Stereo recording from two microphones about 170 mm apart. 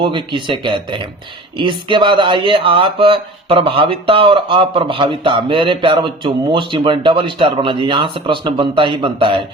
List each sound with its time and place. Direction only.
0.0 s speech: 30° right (ahead or behind)